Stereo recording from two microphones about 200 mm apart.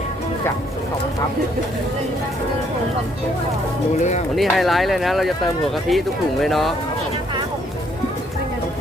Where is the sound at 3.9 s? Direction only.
35° left (ahead or behind).